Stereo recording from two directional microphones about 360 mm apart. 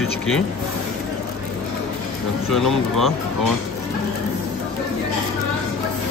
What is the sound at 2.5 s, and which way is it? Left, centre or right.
Speech, centre.